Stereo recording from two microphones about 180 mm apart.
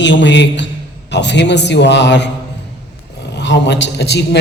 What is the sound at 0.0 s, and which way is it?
A man's voice, 85° left.